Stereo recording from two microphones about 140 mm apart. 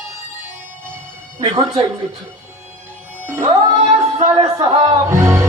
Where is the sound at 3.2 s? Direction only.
25° right (ahead or behind).